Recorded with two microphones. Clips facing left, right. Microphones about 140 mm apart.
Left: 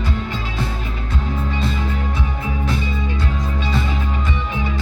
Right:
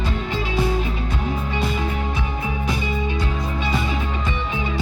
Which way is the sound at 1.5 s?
15° right (ahead or behind).